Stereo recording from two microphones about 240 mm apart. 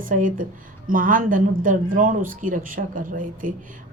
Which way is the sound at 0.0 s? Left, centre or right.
Right.